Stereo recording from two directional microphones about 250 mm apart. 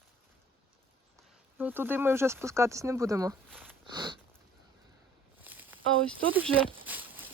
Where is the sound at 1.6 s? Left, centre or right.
Centre.